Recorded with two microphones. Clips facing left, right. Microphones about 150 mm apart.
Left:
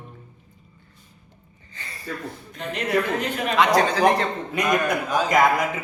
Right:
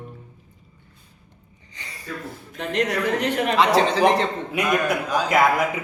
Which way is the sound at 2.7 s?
75° right (ahead or behind).